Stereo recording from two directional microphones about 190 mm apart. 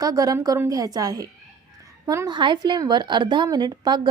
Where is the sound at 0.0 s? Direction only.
20° right (ahead or behind).